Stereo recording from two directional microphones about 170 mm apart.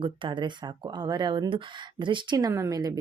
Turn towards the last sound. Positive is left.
turn(degrees=-20)  # may be behind; listen again after turning